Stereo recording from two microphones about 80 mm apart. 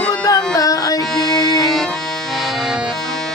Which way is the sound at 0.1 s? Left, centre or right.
Left.